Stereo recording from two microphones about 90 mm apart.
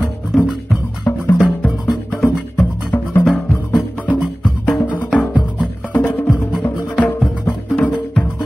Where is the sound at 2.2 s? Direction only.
25° left (ahead or behind).